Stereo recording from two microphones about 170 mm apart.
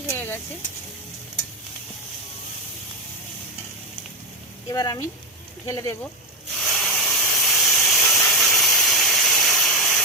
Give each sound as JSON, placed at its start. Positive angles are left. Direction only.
{"t": 0.1, "sound": "snake", "side_deg": 15}
{"t": 4.7, "sound": "speech", "side_deg": 20}
{"t": 6.6, "sound": "steam", "side_deg": 0}